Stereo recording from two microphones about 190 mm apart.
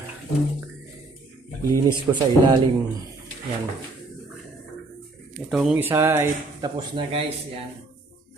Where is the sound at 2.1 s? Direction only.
15° right (ahead or behind).